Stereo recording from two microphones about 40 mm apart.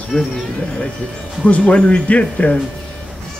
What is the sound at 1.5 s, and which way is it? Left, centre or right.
Speech, left.